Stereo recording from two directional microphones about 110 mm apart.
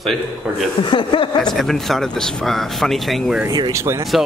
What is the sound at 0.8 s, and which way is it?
Speech, 50° left (ahead or behind).